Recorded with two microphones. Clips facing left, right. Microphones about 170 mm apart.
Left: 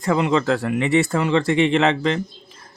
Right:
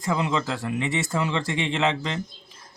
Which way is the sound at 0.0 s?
60° left (ahead or behind).